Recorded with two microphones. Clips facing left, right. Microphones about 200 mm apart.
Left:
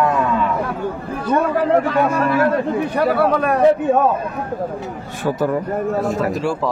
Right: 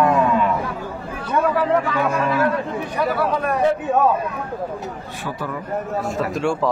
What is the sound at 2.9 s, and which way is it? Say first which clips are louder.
Speech: left 4 dB; 60° left (ahead or behind).